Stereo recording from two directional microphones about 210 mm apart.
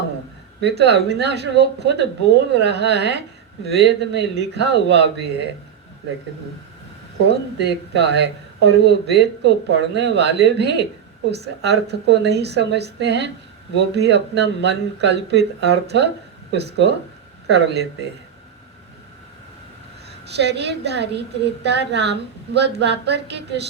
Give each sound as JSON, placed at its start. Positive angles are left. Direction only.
{"t": 0.6, "sound": "a woman's voice", "side_deg": -50}
{"t": 7.3, "sound": "a woman's voice", "side_deg": -55}
{"t": 20.3, "sound": "a woman's voice", "side_deg": -55}